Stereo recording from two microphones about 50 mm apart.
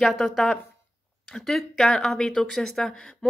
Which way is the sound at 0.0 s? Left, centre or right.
Centre.